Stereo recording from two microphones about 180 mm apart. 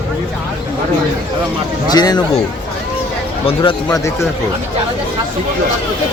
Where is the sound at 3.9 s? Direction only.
15° left (ahead or behind).